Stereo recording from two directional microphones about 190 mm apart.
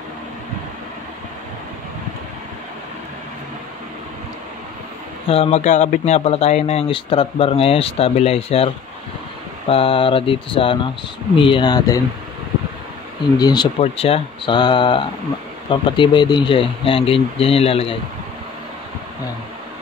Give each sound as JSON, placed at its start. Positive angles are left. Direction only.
{"t": 5.3, "sound": "speech", "side_deg": 35}
{"t": 13.4, "sound": "speech", "side_deg": 20}